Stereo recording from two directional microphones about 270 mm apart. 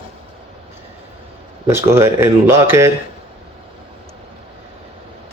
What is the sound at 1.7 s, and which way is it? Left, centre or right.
Speech, centre.